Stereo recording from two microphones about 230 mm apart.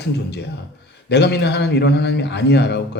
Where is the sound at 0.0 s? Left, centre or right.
Left.